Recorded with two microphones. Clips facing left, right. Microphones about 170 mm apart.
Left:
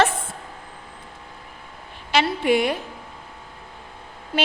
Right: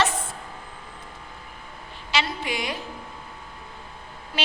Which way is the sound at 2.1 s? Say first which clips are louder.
Left 8 dB; 60° left (ahead or behind).